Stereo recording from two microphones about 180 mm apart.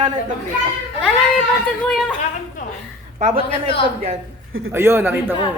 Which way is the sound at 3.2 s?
35° right (ahead or behind).